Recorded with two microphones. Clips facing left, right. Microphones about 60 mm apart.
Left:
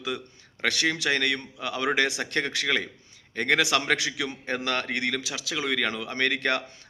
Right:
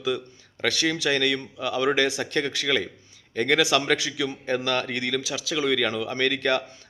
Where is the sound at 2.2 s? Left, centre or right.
Left.